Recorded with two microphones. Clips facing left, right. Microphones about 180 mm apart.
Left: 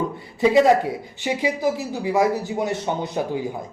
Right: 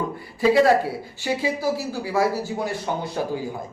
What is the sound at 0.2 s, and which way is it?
Speech, 20° left (ahead or behind).